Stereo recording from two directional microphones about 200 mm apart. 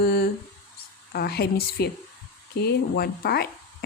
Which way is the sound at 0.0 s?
50° left (ahead or behind).